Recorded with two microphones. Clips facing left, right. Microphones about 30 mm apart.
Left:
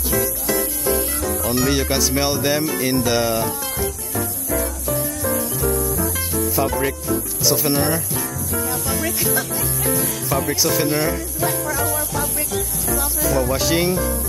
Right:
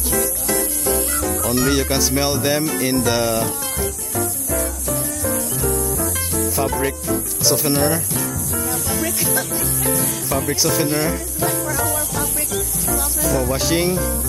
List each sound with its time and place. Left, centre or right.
0.1 s music: centre
6.1 s music: centre
7.4 s speech: centre
13.0 s speech: centre